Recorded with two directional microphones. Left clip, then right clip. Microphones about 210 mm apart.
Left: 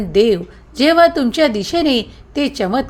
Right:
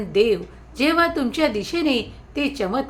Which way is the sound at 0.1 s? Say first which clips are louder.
Left 5 dB; 35° left (ahead or behind).